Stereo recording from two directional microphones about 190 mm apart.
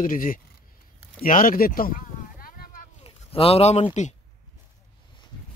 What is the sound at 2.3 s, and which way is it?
Boat, 45° left (ahead or behind).